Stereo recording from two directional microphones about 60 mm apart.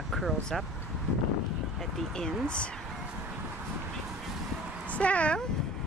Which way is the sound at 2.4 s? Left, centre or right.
Centre.